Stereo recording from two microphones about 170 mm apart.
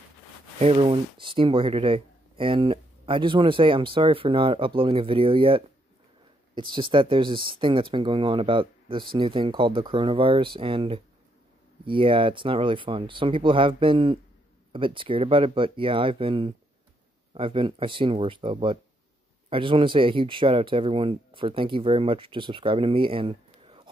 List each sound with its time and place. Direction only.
0.6 s speech: 35° right (ahead or behind)